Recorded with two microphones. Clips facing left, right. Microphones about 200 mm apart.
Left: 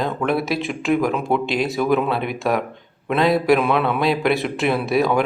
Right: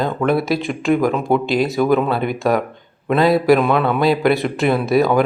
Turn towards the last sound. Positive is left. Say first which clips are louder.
# right 3 dB
turn(degrees=0)  # may be behind; listen again after turning